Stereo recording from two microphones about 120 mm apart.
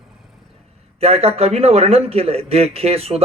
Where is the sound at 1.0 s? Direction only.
60° right (ahead or behind).